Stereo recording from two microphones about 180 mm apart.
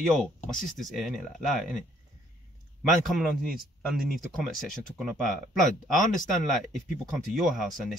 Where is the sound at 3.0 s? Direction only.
Centre (ahead or behind).